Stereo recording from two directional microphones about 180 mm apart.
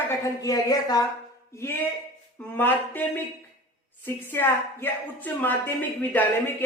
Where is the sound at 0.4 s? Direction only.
20° left (ahead or behind).